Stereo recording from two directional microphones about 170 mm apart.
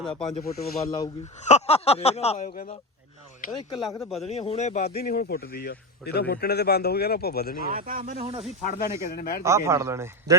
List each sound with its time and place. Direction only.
0.2 s speech: 35° left (ahead or behind)
0.9 s speech: 25° left (ahead or behind)
1.4 s speech: 40° left (ahead or behind)
3.5 s speech: 25° left (ahead or behind)
3.8 s speech: centre (ahead or behind)
4.3 s speech: 40° left (ahead or behind)
4.9 s speech: 65° left (ahead or behind)
7.7 s speech: 55° right (ahead or behind)
8.8 s speech: 65° left (ahead or behind)
9.4 s speech: 15° right (ahead or behind)